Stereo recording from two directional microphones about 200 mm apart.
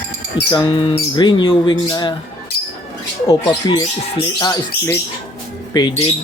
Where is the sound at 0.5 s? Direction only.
25° left (ahead or behind).